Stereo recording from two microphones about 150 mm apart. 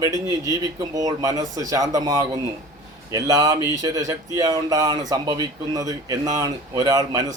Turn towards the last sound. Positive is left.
turn(degrees=-25)  # may be behind; listen again after turning